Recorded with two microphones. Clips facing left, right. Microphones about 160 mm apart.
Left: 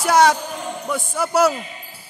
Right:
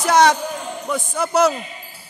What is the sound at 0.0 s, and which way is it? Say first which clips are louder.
Basketball bounce: even; 5° left (ahead or behind).